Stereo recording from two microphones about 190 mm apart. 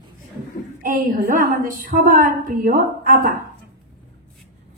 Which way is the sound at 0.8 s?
45° right (ahead or behind).